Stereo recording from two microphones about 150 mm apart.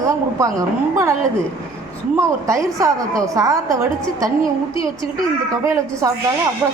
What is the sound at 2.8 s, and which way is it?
A woman's voice, 20° right (ahead or behind).